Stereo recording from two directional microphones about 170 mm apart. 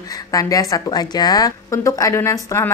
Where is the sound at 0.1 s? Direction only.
20° left (ahead or behind).